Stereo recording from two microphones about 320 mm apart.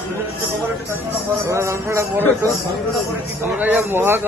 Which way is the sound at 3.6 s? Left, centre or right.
Centre.